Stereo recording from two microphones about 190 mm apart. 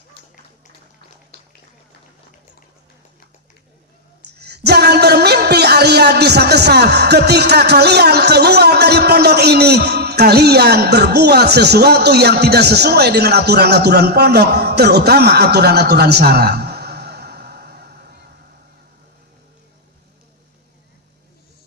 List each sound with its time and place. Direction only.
4.4 s music: 60° right (ahead or behind)